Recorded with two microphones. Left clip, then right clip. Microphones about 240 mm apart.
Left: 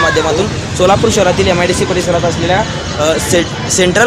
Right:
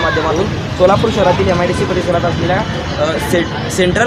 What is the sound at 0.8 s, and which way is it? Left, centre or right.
Speech, left.